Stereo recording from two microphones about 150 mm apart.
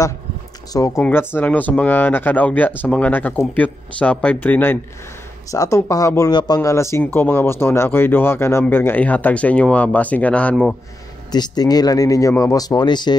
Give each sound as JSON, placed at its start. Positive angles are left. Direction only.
{"t": 0.7, "sound": "speech", "side_deg": 20}
{"t": 11.3, "sound": "speech", "side_deg": 25}